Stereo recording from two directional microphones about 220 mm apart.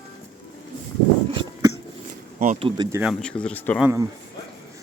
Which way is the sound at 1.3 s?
25° right (ahead or behind).